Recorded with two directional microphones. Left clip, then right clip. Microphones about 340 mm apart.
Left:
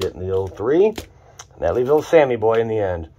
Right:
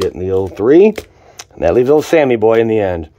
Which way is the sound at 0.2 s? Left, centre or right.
Right.